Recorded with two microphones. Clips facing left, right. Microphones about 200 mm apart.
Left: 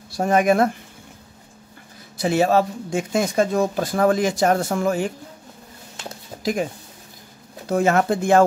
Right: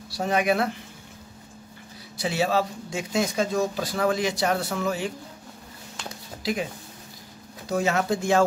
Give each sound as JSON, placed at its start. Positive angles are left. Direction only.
{"t": 0.1, "sound": "speech", "side_deg": 50}
{"t": 2.1, "sound": "speech", "side_deg": 50}
{"t": 6.4, "sound": "speech", "side_deg": 45}
{"t": 7.7, "sound": "speech", "side_deg": 55}